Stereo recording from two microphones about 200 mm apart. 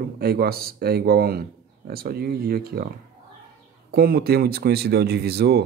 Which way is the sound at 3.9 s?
50° right (ahead or behind).